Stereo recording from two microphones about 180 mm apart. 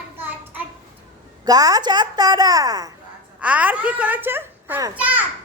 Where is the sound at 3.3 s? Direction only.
10° right (ahead or behind).